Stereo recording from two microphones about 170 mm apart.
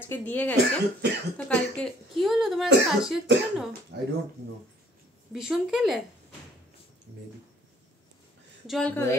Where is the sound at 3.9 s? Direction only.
80° right.